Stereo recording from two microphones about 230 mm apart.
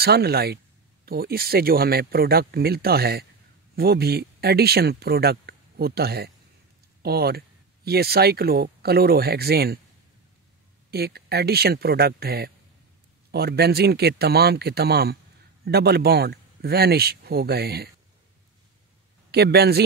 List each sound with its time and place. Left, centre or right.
0.0 s speech: right
10.9 s speech: right
19.3 s speech: right